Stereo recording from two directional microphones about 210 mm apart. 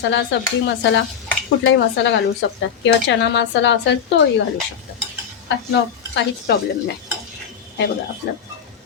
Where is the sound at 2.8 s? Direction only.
55° left (ahead or behind).